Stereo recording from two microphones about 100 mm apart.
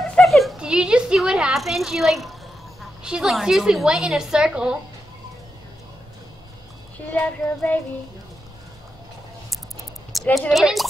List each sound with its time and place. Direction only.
0.1 s a woman's voice: centre (ahead or behind)
7.1 s child singing: 15° left (ahead or behind)
10.1 s a sound: centre (ahead or behind)
10.5 s a woman's voice: centre (ahead or behind)